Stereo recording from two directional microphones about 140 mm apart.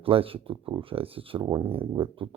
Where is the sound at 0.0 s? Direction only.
40° right (ahead or behind).